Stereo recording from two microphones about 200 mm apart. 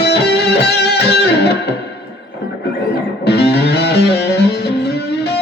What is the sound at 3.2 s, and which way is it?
Music, 55° left (ahead or behind).